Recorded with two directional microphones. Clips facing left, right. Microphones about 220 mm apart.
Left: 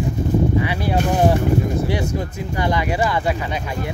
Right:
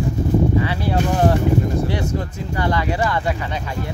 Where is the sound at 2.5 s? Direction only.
15° left (ahead or behind).